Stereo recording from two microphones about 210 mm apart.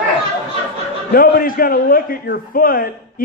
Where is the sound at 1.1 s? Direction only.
45° left (ahead or behind).